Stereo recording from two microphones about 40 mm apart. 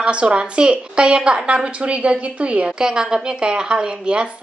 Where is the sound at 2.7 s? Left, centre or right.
Centre.